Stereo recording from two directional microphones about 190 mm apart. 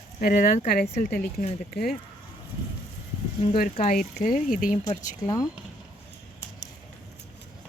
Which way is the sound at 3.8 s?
45° left (ahead or behind).